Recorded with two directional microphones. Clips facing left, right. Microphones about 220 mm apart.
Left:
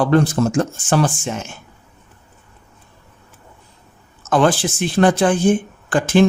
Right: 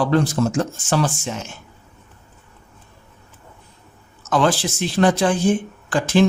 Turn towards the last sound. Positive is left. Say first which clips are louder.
# left 2 dB
turn(degrees=50)  # may be behind; listen again after turning